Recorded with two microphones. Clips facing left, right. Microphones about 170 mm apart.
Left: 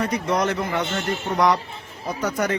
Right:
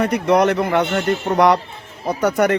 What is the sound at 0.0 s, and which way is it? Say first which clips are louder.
A man's voice: right 7 dB; 65° right (ahead or behind).